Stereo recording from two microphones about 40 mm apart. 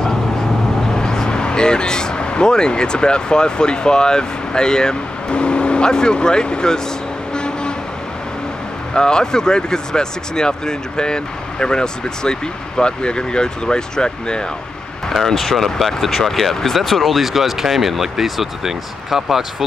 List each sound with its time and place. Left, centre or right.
0.9 s speech: centre
7.3 s vehicle: left
8.9 s speech: centre
15.0 s speech: centre